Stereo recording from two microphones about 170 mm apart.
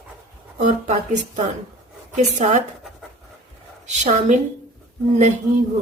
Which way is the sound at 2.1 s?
45° right (ahead or behind).